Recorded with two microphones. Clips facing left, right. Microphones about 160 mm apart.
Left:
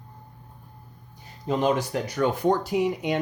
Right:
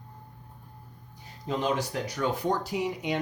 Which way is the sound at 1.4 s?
50° left (ahead or behind).